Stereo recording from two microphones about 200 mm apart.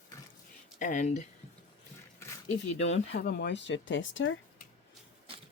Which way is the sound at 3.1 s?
55° left (ahead or behind).